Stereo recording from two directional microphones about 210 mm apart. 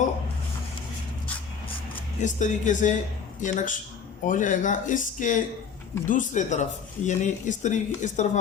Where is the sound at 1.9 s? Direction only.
35° left (ahead or behind).